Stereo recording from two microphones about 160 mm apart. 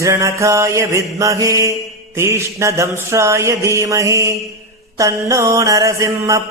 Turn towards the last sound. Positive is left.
turn(degrees=-20)  # may be behind; listen again after turning